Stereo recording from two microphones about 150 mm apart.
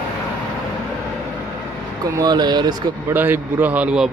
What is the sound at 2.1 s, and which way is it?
Speech, 25° right (ahead or behind).